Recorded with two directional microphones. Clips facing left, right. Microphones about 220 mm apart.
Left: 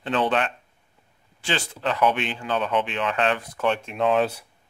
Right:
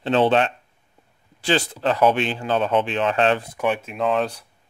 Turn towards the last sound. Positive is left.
turn(degrees=5)  # may be behind; listen again after turning